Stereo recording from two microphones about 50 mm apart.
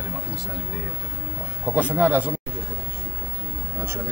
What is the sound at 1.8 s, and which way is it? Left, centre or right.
Speech, right.